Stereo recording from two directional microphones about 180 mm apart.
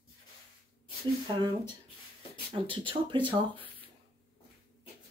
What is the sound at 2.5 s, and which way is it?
Speech, 30° right (ahead or behind).